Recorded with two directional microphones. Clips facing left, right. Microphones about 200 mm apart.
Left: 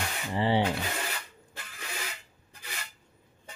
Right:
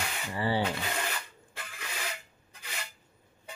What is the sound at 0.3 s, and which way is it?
Speech, 25° left (ahead or behind).